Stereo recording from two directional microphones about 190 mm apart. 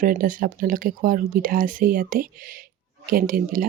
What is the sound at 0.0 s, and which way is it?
Speech, 45° right (ahead or behind).